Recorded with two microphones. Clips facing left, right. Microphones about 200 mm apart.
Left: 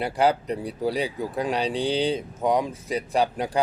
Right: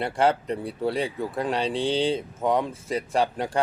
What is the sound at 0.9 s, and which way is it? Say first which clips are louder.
Speech: even; 30° right (ahead or behind).